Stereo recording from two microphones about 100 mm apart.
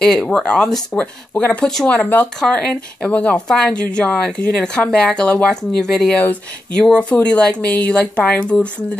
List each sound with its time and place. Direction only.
0.0 s speech: 10° left (ahead or behind)